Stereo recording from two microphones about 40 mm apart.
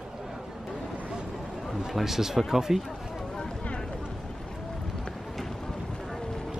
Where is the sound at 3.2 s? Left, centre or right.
Centre.